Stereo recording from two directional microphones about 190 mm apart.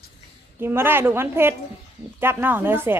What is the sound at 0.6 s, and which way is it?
Speech, 10° right (ahead or behind).